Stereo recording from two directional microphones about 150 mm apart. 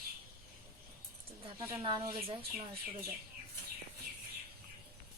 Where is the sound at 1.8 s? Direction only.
35° right (ahead or behind).